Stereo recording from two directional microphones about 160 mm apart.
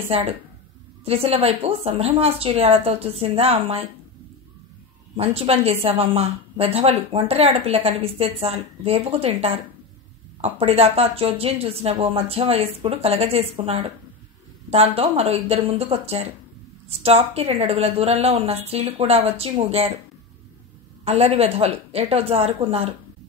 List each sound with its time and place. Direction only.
0.1 s a woman's voice: 40° right (ahead or behind)
5.1 s a woman's voice: 35° right (ahead or behind)
21.0 s a woman's voice: 40° right (ahead or behind)